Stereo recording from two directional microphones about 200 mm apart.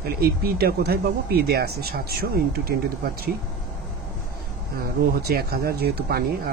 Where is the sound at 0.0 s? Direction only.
50° right (ahead or behind).